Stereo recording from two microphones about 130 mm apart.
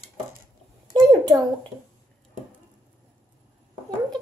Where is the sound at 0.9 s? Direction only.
30° right (ahead or behind).